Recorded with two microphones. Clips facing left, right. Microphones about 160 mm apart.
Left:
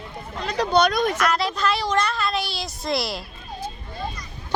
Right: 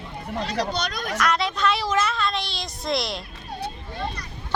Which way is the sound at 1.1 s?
Centre (ahead or behind).